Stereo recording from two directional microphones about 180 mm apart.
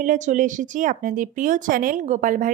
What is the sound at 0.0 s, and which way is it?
A woman's voice, 45° right (ahead or behind).